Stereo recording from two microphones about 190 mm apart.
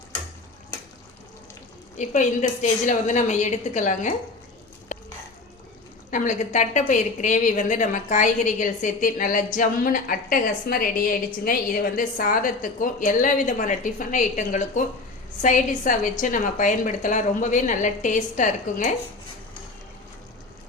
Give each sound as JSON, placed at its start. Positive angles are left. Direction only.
{"t": 2.0, "sound": "a woman's voice", "side_deg": 40}
{"t": 6.1, "sound": "a woman's voice", "side_deg": 40}